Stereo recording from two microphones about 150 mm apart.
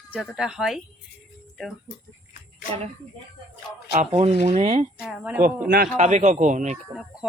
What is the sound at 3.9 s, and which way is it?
Speech, 45° right (ahead or behind).